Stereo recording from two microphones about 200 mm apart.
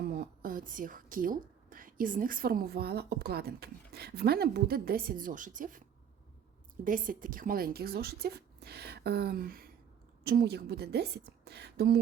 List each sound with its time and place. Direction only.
0.0 s a woman's voice: 50° right (ahead or behind)
6.8 s a woman's voice: 45° right (ahead or behind)